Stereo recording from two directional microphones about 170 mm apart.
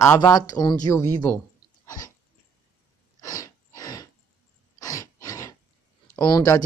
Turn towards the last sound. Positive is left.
turn(degrees=20)  # may be behind; listen again after turning